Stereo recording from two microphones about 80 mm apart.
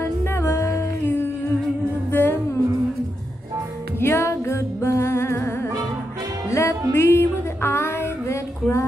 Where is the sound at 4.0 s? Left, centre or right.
Left.